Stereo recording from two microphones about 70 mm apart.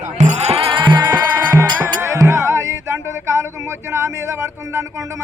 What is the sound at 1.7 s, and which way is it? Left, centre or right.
Music, right.